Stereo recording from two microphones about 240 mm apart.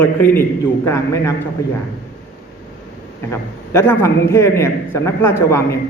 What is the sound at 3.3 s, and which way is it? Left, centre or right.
A man's voice, centre.